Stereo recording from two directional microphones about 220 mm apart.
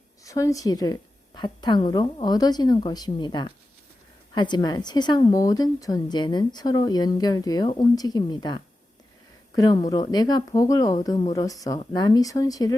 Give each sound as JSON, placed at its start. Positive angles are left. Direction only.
{"t": 0.3, "sound": "a woman's voice", "side_deg": 15}